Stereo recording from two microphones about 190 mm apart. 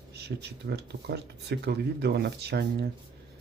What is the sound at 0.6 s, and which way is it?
Speech, 60° right (ahead or behind).